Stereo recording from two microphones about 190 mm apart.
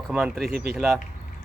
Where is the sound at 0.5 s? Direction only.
55° right (ahead or behind).